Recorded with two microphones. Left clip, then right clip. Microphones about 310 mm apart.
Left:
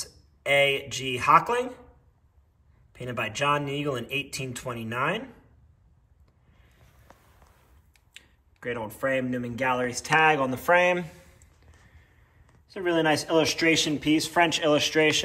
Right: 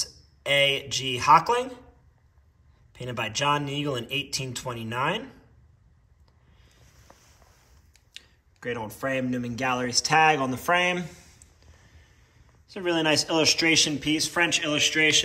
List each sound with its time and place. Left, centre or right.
0.0 s speech: centre
2.9 s speech: centre
8.1 s speech: centre
12.6 s speech: centre